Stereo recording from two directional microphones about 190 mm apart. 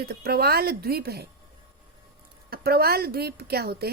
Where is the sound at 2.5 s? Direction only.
55° right (ahead or behind).